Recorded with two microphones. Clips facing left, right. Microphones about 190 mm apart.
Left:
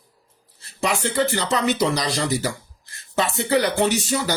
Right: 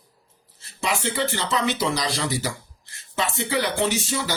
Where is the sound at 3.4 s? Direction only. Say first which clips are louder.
Left 4 dB; 40° left (ahead or behind).